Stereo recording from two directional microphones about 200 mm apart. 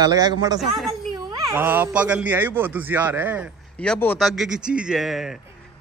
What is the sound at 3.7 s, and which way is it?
A man's voice, 5° left (ahead or behind).